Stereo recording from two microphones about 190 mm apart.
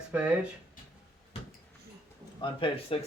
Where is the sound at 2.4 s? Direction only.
25° left (ahead or behind).